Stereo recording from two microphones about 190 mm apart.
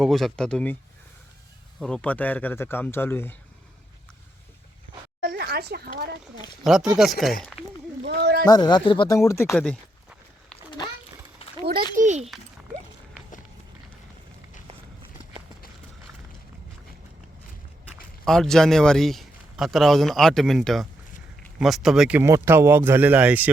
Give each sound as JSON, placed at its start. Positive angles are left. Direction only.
{"t": 0.0, "sound": "speech", "side_deg": 0}
{"t": 1.8, "sound": "a man's voice", "side_deg": 5}
{"t": 5.2, "sound": "speech", "side_deg": -55}
{"t": 6.7, "sound": "speech", "side_deg": 0}
{"t": 8.0, "sound": "a sound", "side_deg": -60}
{"t": 8.4, "sound": "a man's voice", "side_deg": 20}
{"t": 11.4, "sound": "a sound", "side_deg": 30}
{"t": 11.9, "sound": "a child's voice", "side_deg": -40}
{"t": 18.3, "sound": "a man's voice", "side_deg": 0}